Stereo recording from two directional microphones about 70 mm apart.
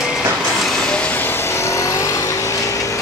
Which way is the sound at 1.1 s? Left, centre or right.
Left.